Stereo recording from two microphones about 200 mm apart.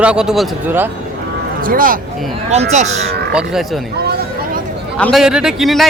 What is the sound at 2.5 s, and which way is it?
Speech, 35° right (ahead or behind).